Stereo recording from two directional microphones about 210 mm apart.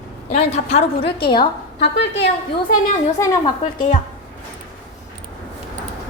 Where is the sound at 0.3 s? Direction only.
30° left (ahead or behind).